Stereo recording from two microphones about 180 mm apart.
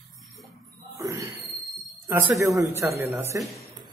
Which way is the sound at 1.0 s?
20° right (ahead or behind).